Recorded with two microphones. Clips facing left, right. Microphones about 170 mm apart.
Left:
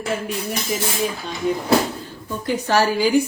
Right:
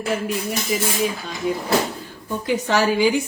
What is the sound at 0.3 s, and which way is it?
Music, centre (ahead or behind).